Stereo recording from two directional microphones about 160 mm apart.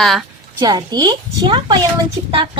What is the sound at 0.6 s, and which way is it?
A woman's voice, 25° right (ahead or behind).